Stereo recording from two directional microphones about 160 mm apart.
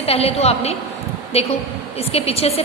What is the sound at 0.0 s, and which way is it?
A woman's voice, 40° left (ahead or behind).